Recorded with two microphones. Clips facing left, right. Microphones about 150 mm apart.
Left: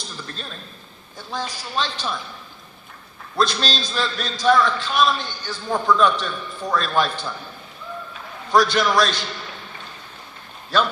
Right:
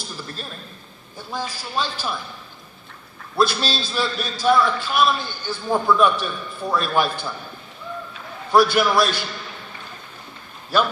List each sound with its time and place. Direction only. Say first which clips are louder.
1.3 s a man's voice: even; 10° right (ahead or behind)
3.3 s a man's voice: right 1 dB; 5° right (ahead or behind)
8.5 s a man's voice: right 1 dB; 10° right (ahead or behind)
10.7 s a man's voice: right 1 dB; 10° right (ahead or behind)